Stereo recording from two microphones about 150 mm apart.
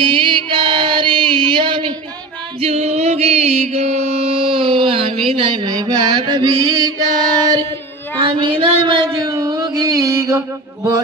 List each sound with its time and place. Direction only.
0.0 s female singing: 35° right (ahead or behind)
2.6 s music: 45° right (ahead or behind); by 6.9 s 25° right (ahead or behind)
8.2 s a sound: 35° right (ahead or behind)